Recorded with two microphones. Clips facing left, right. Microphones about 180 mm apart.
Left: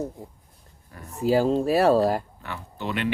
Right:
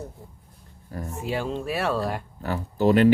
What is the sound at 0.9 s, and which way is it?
Speech, 35° right (ahead or behind).